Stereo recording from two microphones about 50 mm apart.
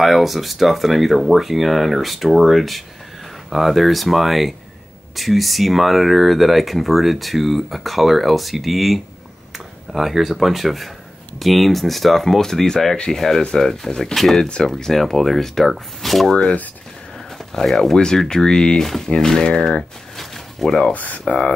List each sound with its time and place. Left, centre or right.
0.0 s speech: centre
17.6 s speech: centre
20.2 s a sound: centre
20.9 s speech: left